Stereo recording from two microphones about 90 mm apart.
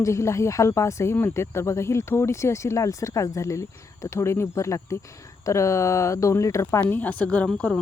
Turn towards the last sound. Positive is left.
turn(degrees=15)  # may be behind; listen again after turning